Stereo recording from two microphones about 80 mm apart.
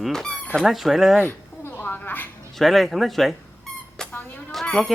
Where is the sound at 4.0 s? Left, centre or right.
Centre.